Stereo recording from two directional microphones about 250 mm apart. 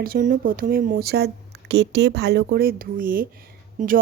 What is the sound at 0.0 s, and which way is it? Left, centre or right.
Speech, right.